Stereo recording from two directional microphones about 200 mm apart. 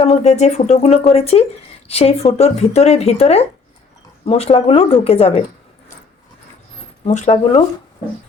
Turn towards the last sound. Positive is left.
turn(degrees=30)  # may be behind; listen again after turning